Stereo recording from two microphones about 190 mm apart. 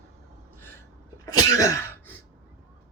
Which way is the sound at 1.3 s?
20° left (ahead or behind).